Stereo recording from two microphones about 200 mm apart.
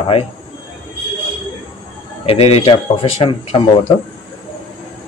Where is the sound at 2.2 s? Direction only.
30° left (ahead or behind).